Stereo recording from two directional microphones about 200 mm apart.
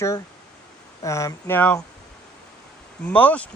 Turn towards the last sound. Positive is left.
turn(degrees=5)  # may be behind; listen again after turning